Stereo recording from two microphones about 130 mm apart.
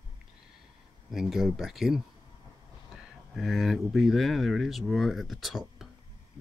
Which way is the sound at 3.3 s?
Centre (ahead or behind).